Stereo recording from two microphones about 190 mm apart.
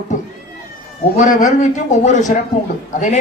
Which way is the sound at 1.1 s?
40° left (ahead or behind).